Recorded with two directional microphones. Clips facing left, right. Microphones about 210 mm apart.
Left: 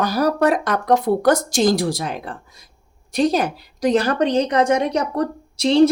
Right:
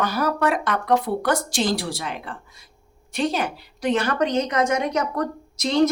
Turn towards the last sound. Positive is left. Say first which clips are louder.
# left 5 dB
turn(degrees=30)  # may be behind; listen again after turning